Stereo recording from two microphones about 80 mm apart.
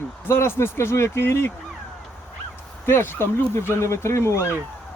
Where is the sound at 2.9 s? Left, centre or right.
Left.